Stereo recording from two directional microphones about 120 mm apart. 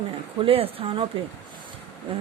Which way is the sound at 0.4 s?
50° right (ahead or behind).